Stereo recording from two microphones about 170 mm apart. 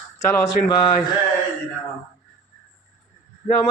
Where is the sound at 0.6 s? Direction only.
55° left (ahead or behind).